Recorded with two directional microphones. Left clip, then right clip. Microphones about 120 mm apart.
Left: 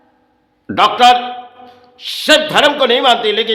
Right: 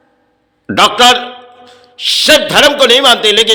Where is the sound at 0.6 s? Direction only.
20° right (ahead or behind).